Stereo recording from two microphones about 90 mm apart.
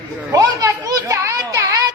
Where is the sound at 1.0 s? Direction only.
30° right (ahead or behind).